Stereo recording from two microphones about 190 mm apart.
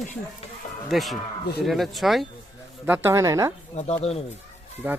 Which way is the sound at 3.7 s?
35° left (ahead or behind).